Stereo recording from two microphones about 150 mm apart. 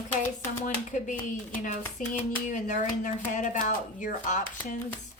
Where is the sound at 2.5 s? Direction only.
55° left (ahead or behind).